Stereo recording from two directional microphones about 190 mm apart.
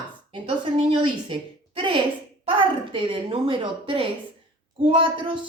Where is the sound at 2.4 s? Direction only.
25° right (ahead or behind).